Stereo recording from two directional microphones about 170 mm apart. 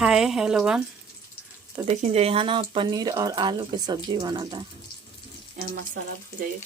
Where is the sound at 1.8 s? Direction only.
35° right (ahead or behind).